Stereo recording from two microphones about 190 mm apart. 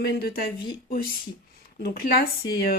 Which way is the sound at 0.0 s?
55° left (ahead or behind).